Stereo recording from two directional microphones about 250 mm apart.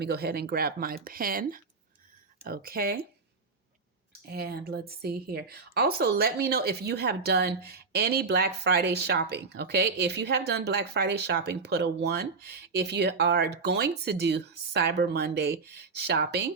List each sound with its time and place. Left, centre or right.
0.0 s a woman's voice: right
4.3 s a woman's voice: right